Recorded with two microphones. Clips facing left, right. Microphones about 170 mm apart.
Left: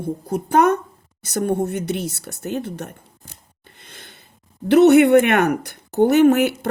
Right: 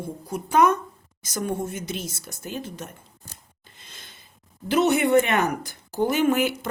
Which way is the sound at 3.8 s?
60° left (ahead or behind).